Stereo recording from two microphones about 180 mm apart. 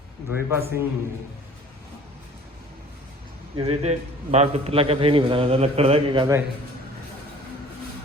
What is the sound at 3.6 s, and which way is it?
A man's voice, 35° right (ahead or behind).